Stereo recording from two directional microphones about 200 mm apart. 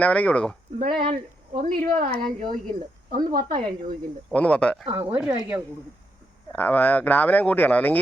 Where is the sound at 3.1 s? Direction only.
45° right (ahead or behind).